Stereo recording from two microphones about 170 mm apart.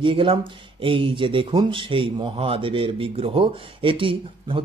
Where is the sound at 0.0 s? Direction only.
30° right (ahead or behind).